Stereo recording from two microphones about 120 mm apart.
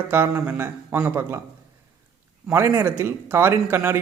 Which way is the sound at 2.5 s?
20° right (ahead or behind).